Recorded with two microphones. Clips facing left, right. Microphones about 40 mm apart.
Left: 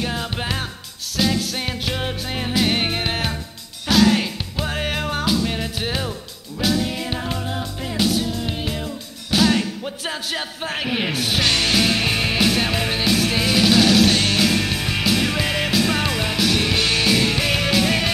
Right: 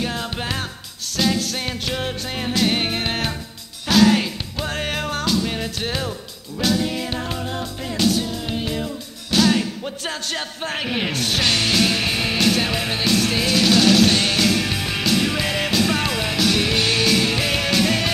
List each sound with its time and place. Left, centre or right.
0.0 s music: centre